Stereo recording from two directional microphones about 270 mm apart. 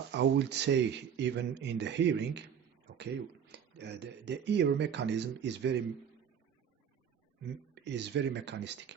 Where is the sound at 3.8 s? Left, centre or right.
Right.